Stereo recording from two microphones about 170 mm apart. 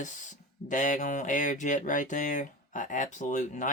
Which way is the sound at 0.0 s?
45° left (ahead or behind).